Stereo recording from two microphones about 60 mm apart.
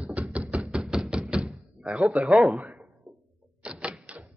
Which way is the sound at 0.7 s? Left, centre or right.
Centre.